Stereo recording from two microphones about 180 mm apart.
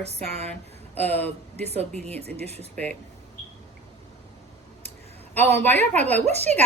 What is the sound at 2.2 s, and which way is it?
Speech, 35° right (ahead or behind).